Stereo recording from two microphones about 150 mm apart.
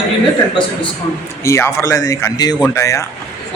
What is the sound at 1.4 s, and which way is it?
A man's voice, 20° left (ahead or behind).